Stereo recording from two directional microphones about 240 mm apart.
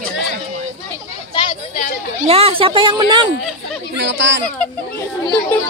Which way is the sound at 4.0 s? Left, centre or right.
Right.